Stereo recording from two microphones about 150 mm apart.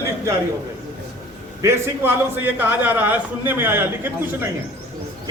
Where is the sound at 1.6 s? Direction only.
15° right (ahead or behind).